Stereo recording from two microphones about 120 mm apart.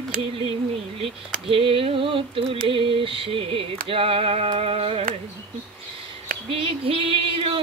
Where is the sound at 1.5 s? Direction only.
50° right (ahead or behind).